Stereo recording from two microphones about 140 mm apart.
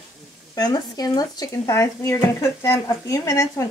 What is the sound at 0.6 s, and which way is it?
Speech, 30° left (ahead or behind).